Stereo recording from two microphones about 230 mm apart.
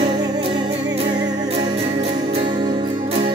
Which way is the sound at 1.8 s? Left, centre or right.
Right.